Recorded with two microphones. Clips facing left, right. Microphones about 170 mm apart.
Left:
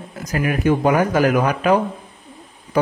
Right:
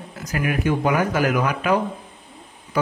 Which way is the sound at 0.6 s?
45° left (ahead or behind).